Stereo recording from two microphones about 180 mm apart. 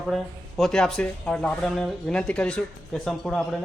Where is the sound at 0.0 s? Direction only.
Centre (ahead or behind).